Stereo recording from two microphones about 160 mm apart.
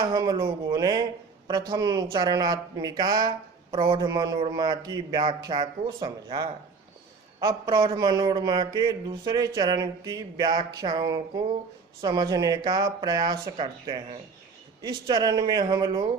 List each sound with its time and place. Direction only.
0.0 s speech: 25° right (ahead or behind)